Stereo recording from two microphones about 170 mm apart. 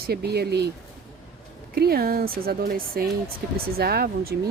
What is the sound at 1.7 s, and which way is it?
Speech, 65° right (ahead or behind).